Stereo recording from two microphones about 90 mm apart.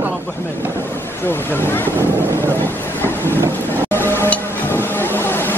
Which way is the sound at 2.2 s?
25° left (ahead or behind).